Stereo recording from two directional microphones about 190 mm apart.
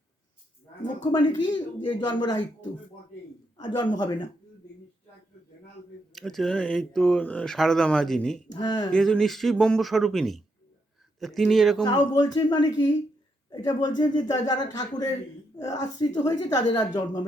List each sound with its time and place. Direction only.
1.0 s speech: 25° left (ahead or behind)
3.6 s speech: 20° left (ahead or behind)
6.1 s speech: centre (ahead or behind)
8.5 s speech: 20° left (ahead or behind)
8.9 s speech: 5° left (ahead or behind)
11.8 s speech: 20° left (ahead or behind)